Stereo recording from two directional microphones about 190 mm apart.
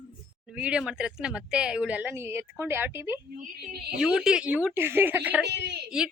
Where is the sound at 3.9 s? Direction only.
5° right (ahead or behind).